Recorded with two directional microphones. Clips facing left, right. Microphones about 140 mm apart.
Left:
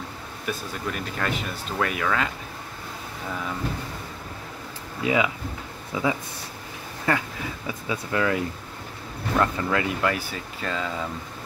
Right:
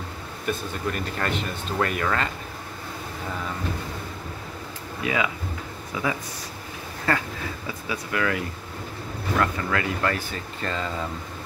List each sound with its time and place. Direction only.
0.5 s speech: 5° left (ahead or behind)
5.0 s speech: 20° left (ahead or behind); by 11.1 s centre (ahead or behind)